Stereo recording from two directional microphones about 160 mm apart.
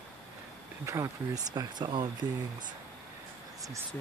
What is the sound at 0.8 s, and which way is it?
Speech, 20° right (ahead or behind).